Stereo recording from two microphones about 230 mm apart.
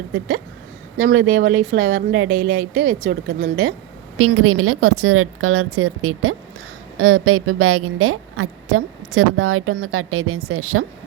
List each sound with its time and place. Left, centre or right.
0.1 s a woman's voice: right
2.3 s speech: right
3.2 s speech: right
4.2 s a woman's voice: right